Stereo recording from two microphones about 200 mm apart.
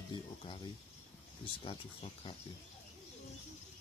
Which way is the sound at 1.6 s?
25° left (ahead or behind).